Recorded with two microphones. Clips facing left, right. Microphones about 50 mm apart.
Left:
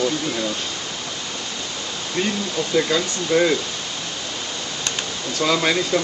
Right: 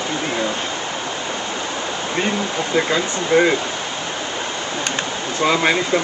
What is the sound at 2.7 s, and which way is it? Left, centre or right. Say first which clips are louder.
Speech: right 1 dB; right.